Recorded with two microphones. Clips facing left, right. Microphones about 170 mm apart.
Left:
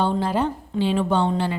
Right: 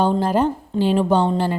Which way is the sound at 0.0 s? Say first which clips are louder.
Right 4 dB; 45° right (ahead or behind).